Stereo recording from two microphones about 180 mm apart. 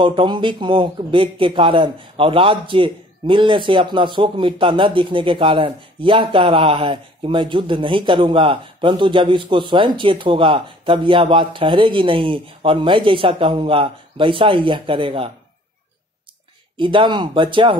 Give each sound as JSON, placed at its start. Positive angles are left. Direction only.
{"t": 0.0, "sound": "speech", "side_deg": -25}
{"t": 16.7, "sound": "speech", "side_deg": -25}